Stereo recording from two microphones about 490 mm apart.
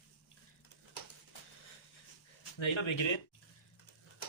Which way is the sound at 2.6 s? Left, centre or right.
Left.